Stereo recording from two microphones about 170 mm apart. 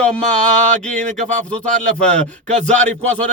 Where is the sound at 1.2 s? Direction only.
45° right (ahead or behind).